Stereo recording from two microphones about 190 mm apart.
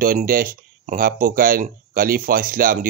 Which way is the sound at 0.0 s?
50° right (ahead or behind).